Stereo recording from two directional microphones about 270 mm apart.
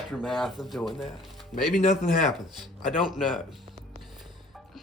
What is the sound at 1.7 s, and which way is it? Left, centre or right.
Speech, left.